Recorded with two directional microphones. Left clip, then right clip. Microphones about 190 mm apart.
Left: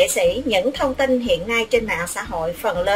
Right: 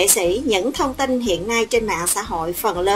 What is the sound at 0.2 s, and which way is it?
A woman's voice, 55° right (ahead or behind).